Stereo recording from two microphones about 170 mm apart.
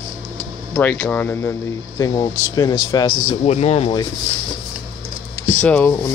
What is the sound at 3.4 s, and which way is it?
Speech, 40° left (ahead or behind).